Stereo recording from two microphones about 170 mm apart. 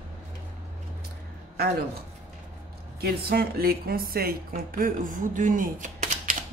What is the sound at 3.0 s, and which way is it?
Speech, 65° right (ahead or behind).